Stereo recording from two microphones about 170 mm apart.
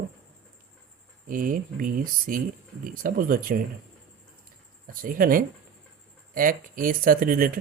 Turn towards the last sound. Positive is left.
turn(degrees=-55)  # may be behind; listen again after turning